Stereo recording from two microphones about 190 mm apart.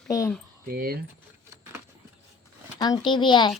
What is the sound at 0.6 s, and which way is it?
Speech, 50° right (ahead or behind).